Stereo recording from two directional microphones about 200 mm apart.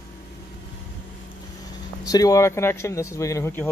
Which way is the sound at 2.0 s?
15° left (ahead or behind).